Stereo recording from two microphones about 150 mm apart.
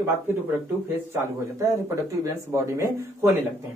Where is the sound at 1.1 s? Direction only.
20° right (ahead or behind).